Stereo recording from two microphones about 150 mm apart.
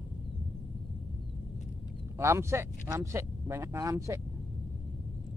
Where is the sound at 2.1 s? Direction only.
20° right (ahead or behind).